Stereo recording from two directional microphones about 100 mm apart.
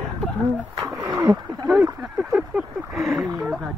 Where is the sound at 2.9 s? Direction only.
Centre (ahead or behind).